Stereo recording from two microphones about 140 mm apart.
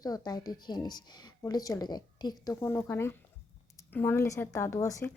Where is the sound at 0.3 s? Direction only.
30° left (ahead or behind).